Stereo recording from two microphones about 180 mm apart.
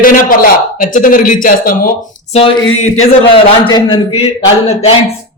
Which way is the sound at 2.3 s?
35° left (ahead or behind).